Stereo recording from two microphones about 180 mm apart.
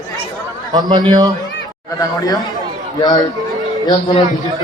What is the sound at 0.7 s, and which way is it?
Speech, 20° right (ahead or behind).